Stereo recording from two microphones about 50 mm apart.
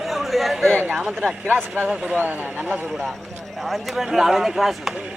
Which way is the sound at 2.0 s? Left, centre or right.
Right.